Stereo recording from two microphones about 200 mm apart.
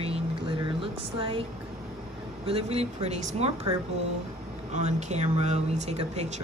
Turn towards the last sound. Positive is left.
turn(degrees=-35)  # may be behind; listen again after turning